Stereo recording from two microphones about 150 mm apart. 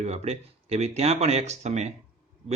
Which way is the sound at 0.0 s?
45° right (ahead or behind).